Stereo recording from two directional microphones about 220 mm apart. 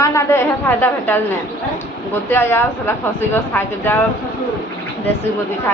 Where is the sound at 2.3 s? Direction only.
10° left (ahead or behind).